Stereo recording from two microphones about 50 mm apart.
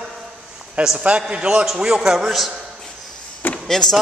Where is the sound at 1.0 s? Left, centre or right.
Right.